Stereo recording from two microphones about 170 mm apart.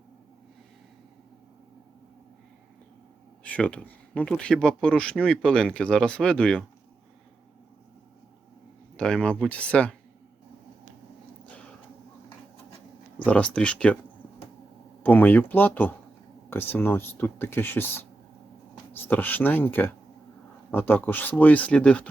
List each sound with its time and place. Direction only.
3.4 s speech: 10° left (ahead or behind)
9.0 s speech: 5° left (ahead or behind)
13.2 s speech: 5° left (ahead or behind)
15.0 s speech: 10° left (ahead or behind)